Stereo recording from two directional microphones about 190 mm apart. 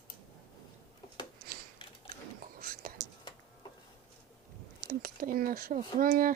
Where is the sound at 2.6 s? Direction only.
50° right (ahead or behind).